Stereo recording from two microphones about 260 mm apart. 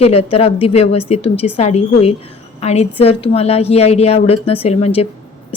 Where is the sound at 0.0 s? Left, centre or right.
Left.